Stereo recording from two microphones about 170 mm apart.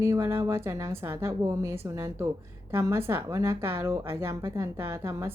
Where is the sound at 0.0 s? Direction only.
15° right (ahead or behind).